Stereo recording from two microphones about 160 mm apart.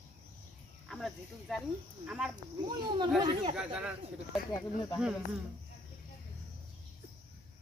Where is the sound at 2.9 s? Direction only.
30° right (ahead or behind).